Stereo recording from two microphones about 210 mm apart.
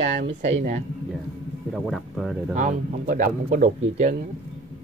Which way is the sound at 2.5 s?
35° right (ahead or behind).